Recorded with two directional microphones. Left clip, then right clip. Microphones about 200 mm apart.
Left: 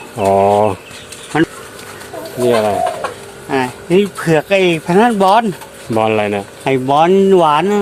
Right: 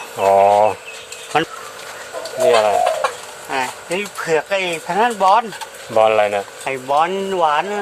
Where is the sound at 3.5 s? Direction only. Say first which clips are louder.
Left 5 dB; 30° left (ahead or behind); by 5.4 s 50° left (ahead or behind).